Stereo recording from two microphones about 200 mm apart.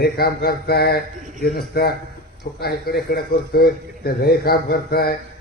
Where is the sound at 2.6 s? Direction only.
50° left (ahead or behind).